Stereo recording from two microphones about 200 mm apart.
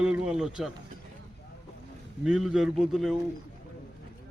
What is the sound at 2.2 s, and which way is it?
Speech, 5° right (ahead or behind).